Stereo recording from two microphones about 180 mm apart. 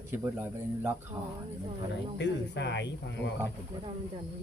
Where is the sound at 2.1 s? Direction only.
75° left (ahead or behind).